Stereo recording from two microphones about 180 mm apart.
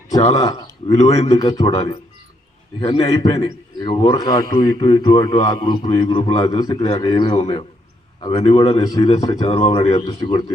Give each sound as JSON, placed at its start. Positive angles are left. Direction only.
{"t": 0.3, "sound": "a man's voice", "side_deg": 20}